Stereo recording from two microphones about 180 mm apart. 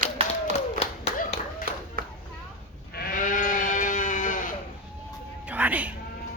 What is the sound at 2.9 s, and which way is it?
Sheep, 50° left (ahead or behind).